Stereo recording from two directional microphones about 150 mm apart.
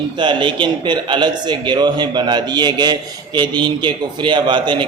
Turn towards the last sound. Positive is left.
turn(degrees=-30)  # may be behind; listen again after turning